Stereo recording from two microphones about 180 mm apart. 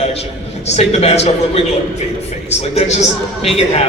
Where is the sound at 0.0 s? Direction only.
35° left (ahead or behind).